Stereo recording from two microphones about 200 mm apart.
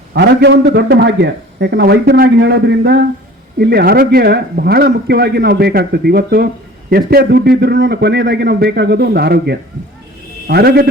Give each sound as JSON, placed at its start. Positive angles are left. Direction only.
{"t": 0.1, "sound": "a man's voice", "side_deg": -55}